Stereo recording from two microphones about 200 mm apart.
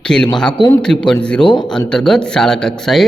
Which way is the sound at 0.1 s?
5° left (ahead or behind).